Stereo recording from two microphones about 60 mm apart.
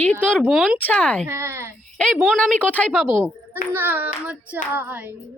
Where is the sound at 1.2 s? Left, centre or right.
Right.